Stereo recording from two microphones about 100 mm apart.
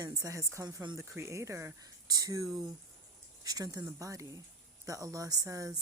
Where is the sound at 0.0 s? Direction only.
35° right (ahead or behind).